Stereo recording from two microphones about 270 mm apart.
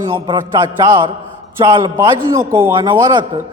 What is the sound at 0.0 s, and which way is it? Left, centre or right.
A man's voice, centre.